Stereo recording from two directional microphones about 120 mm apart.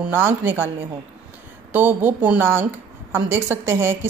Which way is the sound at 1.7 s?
15° right (ahead or behind).